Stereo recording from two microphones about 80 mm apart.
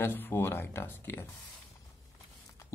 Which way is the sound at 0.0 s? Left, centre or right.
Left.